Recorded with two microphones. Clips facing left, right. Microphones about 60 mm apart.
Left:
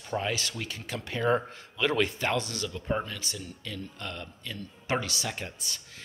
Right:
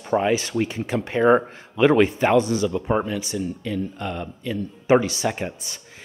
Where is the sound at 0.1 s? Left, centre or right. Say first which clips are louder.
Right 11 dB; right.